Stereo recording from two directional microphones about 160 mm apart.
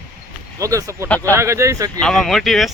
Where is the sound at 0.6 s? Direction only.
20° right (ahead or behind).